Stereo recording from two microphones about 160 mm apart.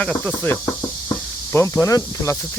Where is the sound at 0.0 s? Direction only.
10° left (ahead or behind).